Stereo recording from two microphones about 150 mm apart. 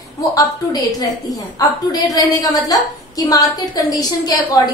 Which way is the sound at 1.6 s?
25° left (ahead or behind).